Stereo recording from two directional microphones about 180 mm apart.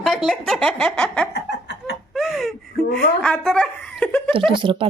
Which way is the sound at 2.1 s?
Centre (ahead or behind).